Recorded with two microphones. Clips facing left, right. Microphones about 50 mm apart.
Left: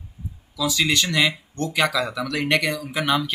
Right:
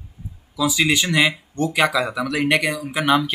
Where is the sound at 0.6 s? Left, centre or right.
Centre.